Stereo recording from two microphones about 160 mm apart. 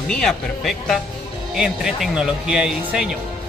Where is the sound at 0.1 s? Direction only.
5° left (ahead or behind).